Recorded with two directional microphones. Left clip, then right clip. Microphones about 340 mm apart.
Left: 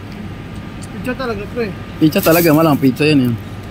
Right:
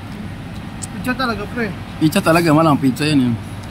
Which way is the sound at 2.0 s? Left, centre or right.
Centre.